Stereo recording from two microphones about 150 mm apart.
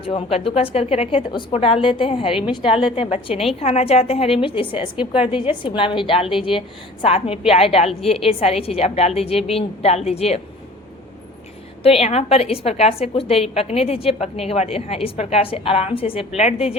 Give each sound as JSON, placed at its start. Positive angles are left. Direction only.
{"t": 0.0, "sound": "a woman's voice", "side_deg": 40}
{"t": 11.8, "sound": "a woman's voice", "side_deg": 40}